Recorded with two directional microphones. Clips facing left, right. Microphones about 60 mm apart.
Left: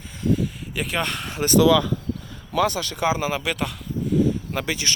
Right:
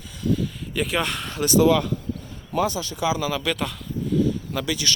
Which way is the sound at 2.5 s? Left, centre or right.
Left.